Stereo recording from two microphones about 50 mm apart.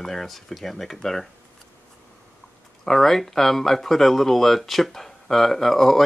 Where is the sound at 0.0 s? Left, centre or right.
Centre.